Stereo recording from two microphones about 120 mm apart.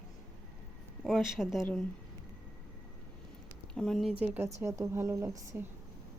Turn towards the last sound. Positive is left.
turn(degrees=-20)  # may be behind; listen again after turning